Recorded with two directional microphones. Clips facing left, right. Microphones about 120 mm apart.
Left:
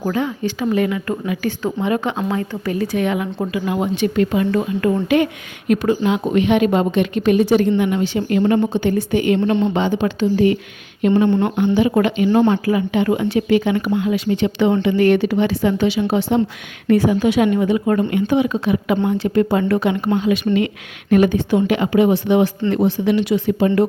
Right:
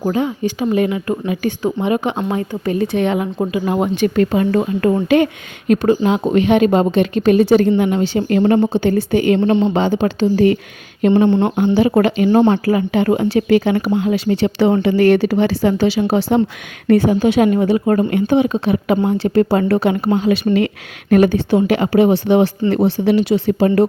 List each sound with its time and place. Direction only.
0.1 s speech: 20° right (ahead or behind)
3.7 s speech: 50° right (ahead or behind); by 8.2 s 30° right (ahead or behind)
8.3 s speech: 45° right (ahead or behind)
8.5 s speech: 30° right (ahead or behind)
10.3 s speech: 45° right (ahead or behind)
11.1 s speech: 25° right (ahead or behind)
11.5 s speech: 40° right (ahead or behind)
13.9 s speech: 45° right (ahead or behind)